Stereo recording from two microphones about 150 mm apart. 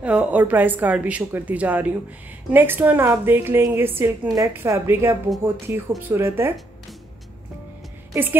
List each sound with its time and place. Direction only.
0.0 s a woman's voice: 10° right (ahead or behind)
8.1 s a woman's voice: 15° right (ahead or behind)